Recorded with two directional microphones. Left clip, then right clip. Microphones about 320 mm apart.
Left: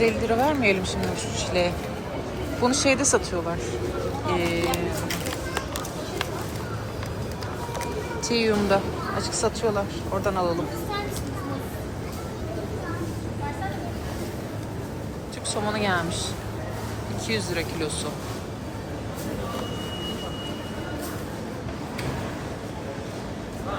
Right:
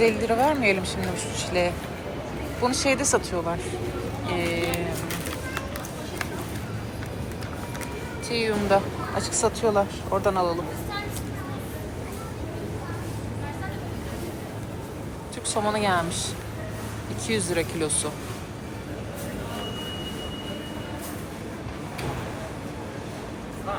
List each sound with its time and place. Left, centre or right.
0.0 s speech: centre
4.3 s speech: left
8.4 s a woman's voice: centre
15.6 s speech: centre
17.2 s speech: centre